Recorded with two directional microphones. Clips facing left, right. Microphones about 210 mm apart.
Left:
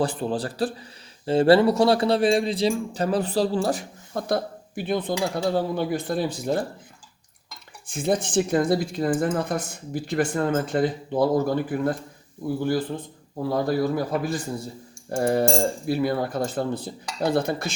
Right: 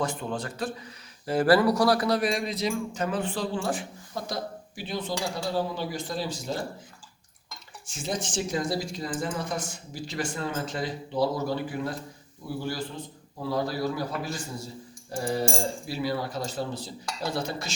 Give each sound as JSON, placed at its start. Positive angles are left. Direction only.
{"t": 0.0, "sound": "speech", "side_deg": 35}
{"t": 4.1, "sound": "a woman's voice", "side_deg": 55}
{"t": 7.9, "sound": "a woman's voice", "side_deg": 55}